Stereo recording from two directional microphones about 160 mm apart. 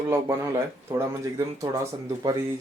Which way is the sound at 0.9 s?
20° right (ahead or behind).